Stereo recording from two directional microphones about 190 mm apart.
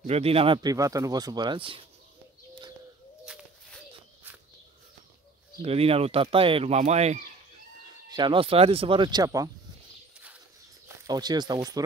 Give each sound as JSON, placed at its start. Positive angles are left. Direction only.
{"t": 0.0, "sound": "speech", "side_deg": -30}
{"t": 3.3, "sound": "a sound", "side_deg": -5}
{"t": 5.6, "sound": "speech", "side_deg": -30}
{"t": 8.1, "sound": "speech", "side_deg": -25}
{"t": 11.1, "sound": "speech", "side_deg": -20}